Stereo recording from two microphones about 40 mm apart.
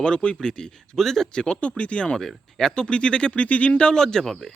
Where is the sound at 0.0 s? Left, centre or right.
Left.